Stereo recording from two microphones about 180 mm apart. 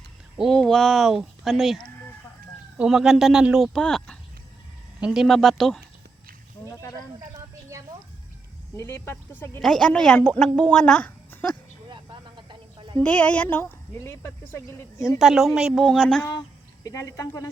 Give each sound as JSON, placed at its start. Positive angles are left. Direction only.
{"t": 0.3, "sound": "a woman's voice", "side_deg": 0}
{"t": 7.3, "sound": "a sound", "side_deg": -15}
{"t": 8.7, "sound": "speech", "side_deg": 15}
{"t": 9.6, "sound": "a woman's voice", "side_deg": 0}
{"t": 12.5, "sound": "a sound", "side_deg": -25}
{"t": 13.0, "sound": "speech", "side_deg": 5}
{"t": 15.2, "sound": "a woman's voice", "side_deg": 0}
{"t": 16.8, "sound": "speech", "side_deg": 15}